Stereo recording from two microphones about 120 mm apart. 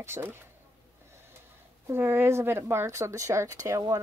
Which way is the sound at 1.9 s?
20° right (ahead or behind).